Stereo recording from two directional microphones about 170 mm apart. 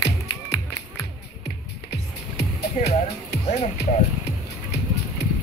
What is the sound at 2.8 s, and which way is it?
Speech, 45° left (ahead or behind).